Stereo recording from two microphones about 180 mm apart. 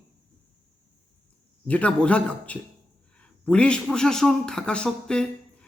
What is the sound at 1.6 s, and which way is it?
A man's voice, 5° left (ahead or behind).